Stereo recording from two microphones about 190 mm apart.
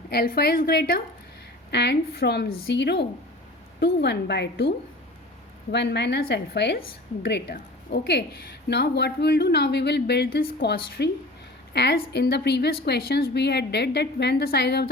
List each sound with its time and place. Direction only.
0.1 s a woman's voice: 55° left (ahead or behind)
5.7 s a woman's voice: 65° left (ahead or behind)